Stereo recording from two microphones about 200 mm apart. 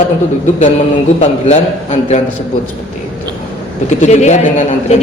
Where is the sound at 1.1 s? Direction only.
35° left (ahead or behind).